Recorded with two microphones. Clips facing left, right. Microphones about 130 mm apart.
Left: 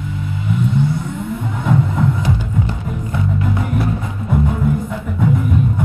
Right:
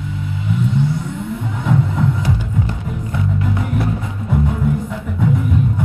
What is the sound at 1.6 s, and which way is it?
Music, 50° left (ahead or behind).